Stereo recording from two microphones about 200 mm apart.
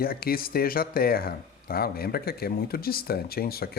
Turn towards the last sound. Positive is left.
turn(degrees=50)  # may be behind; listen again after turning